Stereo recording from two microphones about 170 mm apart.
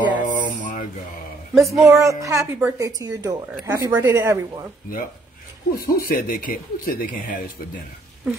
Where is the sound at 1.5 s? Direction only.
Centre (ahead or behind).